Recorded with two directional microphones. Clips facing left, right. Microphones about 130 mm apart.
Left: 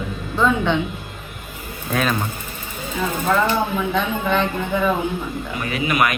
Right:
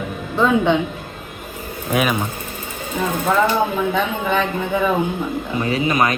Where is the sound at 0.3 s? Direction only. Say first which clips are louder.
Right 3 dB; 15° right (ahead or behind).